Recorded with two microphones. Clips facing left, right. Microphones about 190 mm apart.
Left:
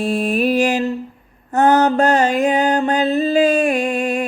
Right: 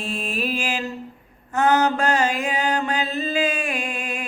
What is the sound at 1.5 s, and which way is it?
Mantra, 35° left (ahead or behind).